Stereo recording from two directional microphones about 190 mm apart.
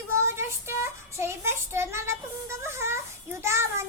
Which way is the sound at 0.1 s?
15° right (ahead or behind).